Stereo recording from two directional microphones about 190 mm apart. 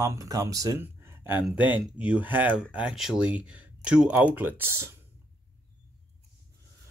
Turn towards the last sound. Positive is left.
turn(degrees=-15)  # may be behind; listen again after turning